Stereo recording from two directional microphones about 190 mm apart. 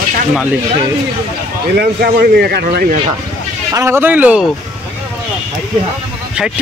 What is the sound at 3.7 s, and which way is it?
Speech, 15° right (ahead or behind).